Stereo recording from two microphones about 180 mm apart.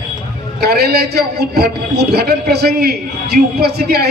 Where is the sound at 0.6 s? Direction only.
65° right (ahead or behind).